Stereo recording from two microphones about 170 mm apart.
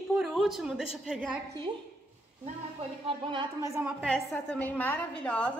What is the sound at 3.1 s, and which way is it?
Speech, 30° right (ahead or behind).